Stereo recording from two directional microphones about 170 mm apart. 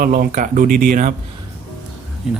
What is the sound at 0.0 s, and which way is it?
Speech, 60° right (ahead or behind).